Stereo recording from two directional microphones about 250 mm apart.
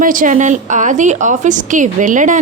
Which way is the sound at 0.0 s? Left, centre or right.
Right.